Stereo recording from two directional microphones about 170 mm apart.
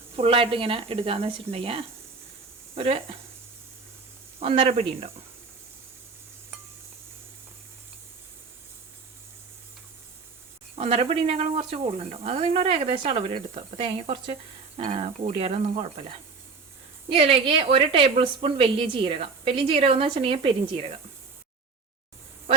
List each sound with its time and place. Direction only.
0.2 s a woman's voice: 35° right (ahead or behind)
4.4 s a woman's voice: 35° right (ahead or behind)
10.8 s a woman's voice: 35° right (ahead or behind)
17.1 s a woman's voice: 30° right (ahead or behind)